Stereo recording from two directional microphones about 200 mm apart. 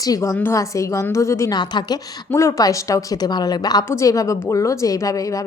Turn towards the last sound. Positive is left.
turn(degrees=15)  # may be behind; listen again after turning